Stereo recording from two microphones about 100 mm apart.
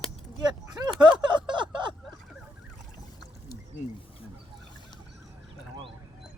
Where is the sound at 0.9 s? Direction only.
50° right (ahead or behind).